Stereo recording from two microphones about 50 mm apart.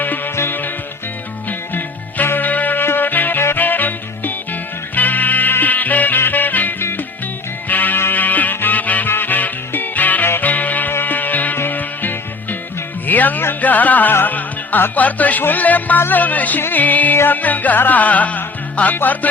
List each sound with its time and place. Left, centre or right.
0.3 s music: left
11.5 s music: left
11.8 s music: left